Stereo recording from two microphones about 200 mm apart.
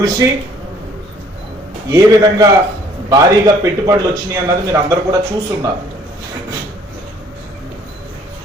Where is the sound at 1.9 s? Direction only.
20° right (ahead or behind).